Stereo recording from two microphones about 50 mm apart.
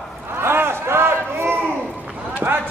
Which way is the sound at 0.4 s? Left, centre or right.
Right.